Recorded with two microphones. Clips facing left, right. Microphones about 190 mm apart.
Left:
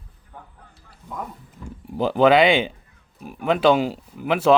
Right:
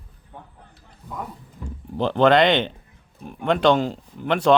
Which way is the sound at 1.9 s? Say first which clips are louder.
Left 1 dB; 5° left (ahead or behind).